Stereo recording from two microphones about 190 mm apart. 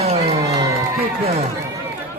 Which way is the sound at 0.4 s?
20° right (ahead or behind).